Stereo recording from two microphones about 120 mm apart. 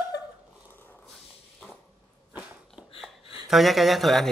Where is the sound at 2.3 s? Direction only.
15° right (ahead or behind).